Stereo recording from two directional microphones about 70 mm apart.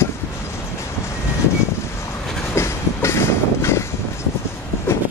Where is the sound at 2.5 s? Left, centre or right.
Left.